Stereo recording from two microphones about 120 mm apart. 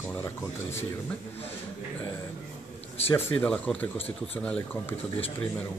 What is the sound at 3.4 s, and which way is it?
Speech, 10° left (ahead or behind).